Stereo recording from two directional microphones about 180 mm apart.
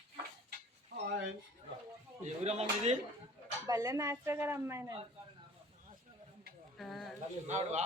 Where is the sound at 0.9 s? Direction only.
70° right (ahead or behind).